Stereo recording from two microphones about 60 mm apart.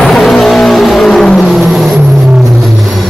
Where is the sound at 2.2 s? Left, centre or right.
Centre.